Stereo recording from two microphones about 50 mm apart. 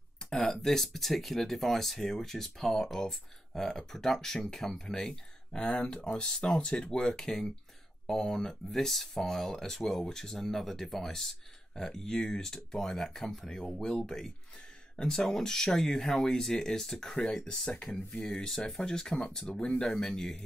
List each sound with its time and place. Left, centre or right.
0.2 s speech: centre